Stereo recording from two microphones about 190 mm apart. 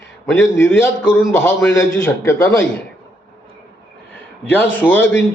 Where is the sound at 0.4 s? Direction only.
10° left (ahead or behind).